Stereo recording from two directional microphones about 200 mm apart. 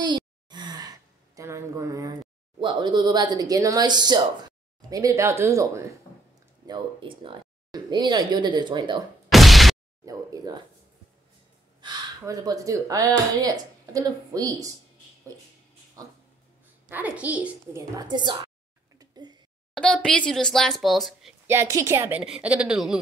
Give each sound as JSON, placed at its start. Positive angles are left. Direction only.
{"t": 0.0, "sound": "sigh", "side_deg": -20}
{"t": 2.6, "sound": "speech", "side_deg": -20}
{"t": 9.3, "sound": "a sound", "side_deg": 0}
{"t": 10.0, "sound": "speech", "side_deg": -20}
{"t": 11.8, "sound": "speech", "side_deg": -20}
{"t": 16.0, "sound": "speech", "side_deg": -20}
{"t": 17.9, "sound": "speech", "side_deg": -20}
{"t": 18.9, "sound": "a sound", "side_deg": -20}
{"t": 19.7, "sound": "speech", "side_deg": 5}
{"t": 21.5, "sound": "speech", "side_deg": -15}